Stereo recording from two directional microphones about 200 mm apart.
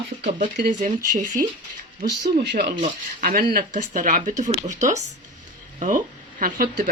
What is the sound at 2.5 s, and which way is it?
Speech, 50° right (ahead or behind).